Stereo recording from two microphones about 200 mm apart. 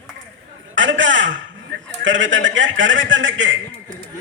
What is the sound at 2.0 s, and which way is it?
A man's voice, 70° right (ahead or behind).